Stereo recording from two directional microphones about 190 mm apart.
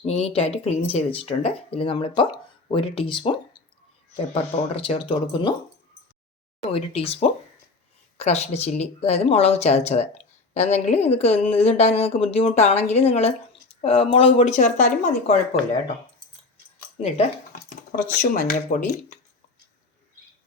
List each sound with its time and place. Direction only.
0.0 s speech: 35° left (ahead or behind)
4.7 s speech: 30° left (ahead or behind)
6.7 s speech: 30° left (ahead or behind)
17.0 s a sound: 40° left (ahead or behind)
18.1 s speech: 50° left (ahead or behind)